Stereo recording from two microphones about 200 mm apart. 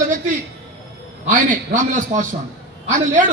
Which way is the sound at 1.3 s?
40° right (ahead or behind).